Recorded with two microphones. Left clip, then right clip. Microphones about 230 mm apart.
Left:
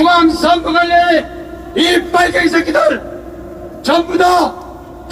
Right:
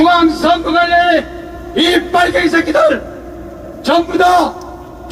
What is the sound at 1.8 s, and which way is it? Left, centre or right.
A man's voice, left.